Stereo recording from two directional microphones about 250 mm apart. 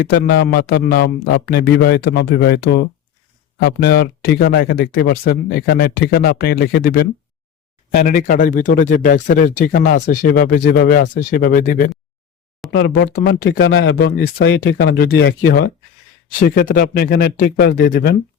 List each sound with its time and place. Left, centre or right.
0.1 s speech: left
12.6 s speech: centre
13.0 s speech: left